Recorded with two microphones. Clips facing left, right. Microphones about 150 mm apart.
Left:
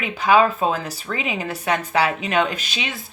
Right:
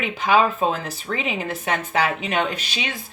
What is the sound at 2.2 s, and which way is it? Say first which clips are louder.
Speech: left 2 dB; 40° left (ahead or behind).